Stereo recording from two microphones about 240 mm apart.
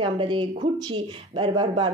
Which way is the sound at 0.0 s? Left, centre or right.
Right.